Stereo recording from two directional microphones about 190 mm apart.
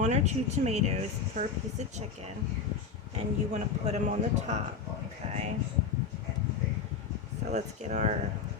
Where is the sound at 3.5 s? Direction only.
35° right (ahead or behind).